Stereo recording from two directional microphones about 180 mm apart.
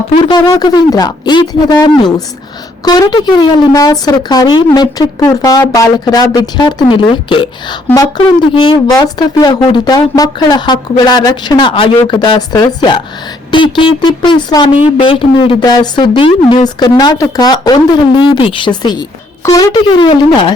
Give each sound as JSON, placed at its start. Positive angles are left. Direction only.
{"t": 0.1, "sound": "speech", "side_deg": 25}